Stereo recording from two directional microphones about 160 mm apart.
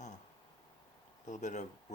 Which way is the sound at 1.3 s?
50° left (ahead or behind).